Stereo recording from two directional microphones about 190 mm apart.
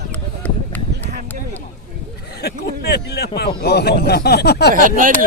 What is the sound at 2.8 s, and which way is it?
Speech, 60° left (ahead or behind).